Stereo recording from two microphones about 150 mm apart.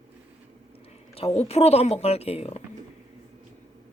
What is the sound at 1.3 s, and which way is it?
Speech, 45° left (ahead or behind).